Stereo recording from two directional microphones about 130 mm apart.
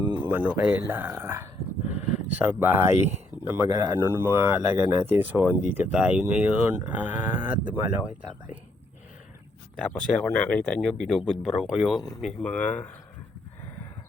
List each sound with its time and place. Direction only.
0.2 s speech: 15° right (ahead or behind)
1.9 s a sound: 15° right (ahead or behind)
3.1 s speech: 20° right (ahead or behind)
9.7 s speech: 5° left (ahead or behind)
12.2 s speech: 10° left (ahead or behind)